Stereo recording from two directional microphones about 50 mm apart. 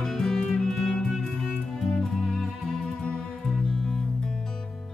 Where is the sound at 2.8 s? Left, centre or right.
Centre.